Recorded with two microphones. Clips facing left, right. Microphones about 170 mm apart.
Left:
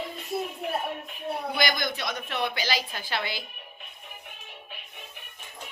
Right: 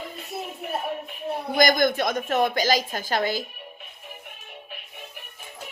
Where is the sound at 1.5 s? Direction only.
45° right (ahead or behind).